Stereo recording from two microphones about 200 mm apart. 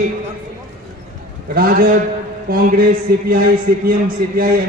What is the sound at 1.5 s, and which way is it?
A man's voice, 45° right (ahead or behind).